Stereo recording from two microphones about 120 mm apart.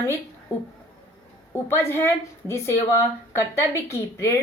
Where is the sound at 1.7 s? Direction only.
20° left (ahead or behind).